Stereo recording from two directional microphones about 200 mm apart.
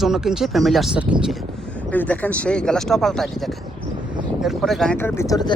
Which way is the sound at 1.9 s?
10° left (ahead or behind).